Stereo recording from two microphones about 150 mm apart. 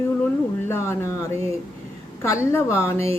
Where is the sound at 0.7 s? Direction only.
20° left (ahead or behind).